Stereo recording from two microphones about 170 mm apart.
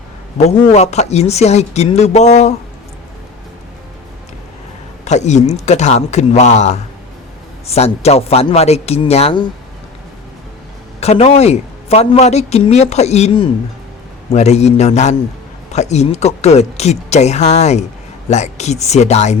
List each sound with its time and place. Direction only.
0.3 s a man's voice: 40° left (ahead or behind)
5.0 s a man's voice: 40° left (ahead or behind)
11.0 s a man's voice: 40° left (ahead or behind)